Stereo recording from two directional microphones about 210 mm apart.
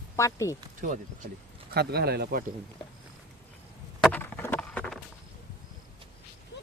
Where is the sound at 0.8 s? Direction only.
40° right (ahead or behind).